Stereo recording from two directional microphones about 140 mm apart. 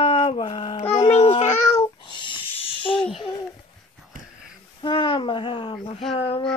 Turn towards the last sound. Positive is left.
turn(degrees=40)  # may be behind; listen again after turning